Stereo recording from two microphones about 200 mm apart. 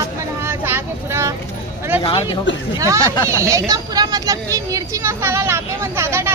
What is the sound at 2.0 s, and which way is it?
Speech, 25° left (ahead or behind).